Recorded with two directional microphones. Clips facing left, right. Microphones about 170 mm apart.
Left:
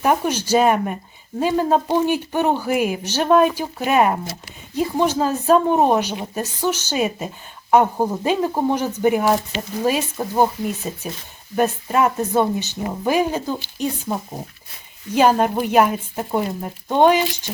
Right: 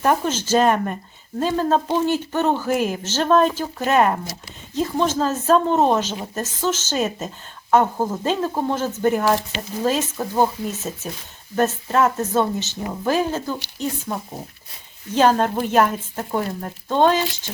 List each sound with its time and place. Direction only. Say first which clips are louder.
0.0 s speech: left 1 dB; 10° left (ahead or behind)
15.1 s speech: left 1 dB; 10° left (ahead or behind)